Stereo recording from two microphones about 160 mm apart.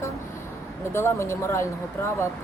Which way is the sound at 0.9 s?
15° left (ahead or behind).